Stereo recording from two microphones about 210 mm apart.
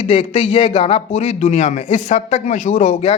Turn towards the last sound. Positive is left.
turn(degrees=30)  # may be behind; listen again after turning